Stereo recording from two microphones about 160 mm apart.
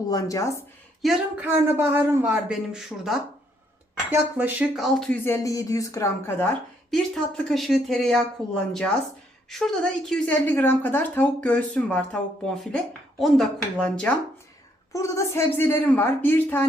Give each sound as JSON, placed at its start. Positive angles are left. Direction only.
{"t": 0.1, "sound": "speech", "side_deg": 20}
{"t": 1.0, "sound": "speech", "side_deg": 0}
{"t": 1.5, "sound": "a woman's voice", "side_deg": -15}
{"t": 6.9, "sound": "a woman's voice", "side_deg": 0}
{"t": 14.9, "sound": "a woman's voice", "side_deg": 20}